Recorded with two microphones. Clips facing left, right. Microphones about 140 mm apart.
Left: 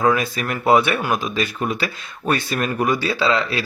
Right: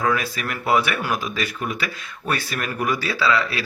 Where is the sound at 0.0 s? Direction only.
25° left (ahead or behind).